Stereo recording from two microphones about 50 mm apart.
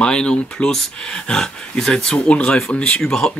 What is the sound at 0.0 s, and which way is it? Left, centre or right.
Speech, centre.